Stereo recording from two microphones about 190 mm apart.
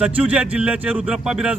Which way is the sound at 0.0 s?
5° right (ahead or behind).